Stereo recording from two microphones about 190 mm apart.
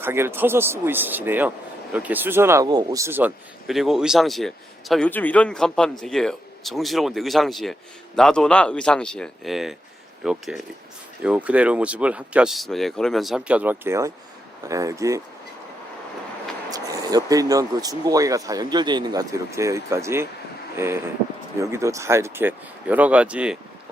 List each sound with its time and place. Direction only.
0.0 s speech: 10° right (ahead or behind)
16.7 s speech: 20° right (ahead or behind)